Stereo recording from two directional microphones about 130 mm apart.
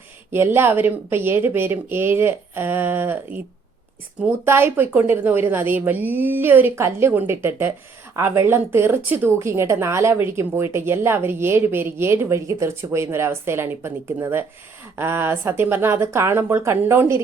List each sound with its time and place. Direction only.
0.3 s speech: 20° right (ahead or behind)
4.2 s speech: 20° right (ahead or behind)